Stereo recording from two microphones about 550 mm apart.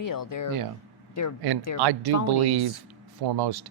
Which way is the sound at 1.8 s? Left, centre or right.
Right.